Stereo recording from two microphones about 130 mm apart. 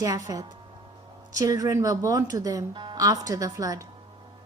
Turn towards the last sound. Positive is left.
turn(degrees=-25)  # may be behind; listen again after turning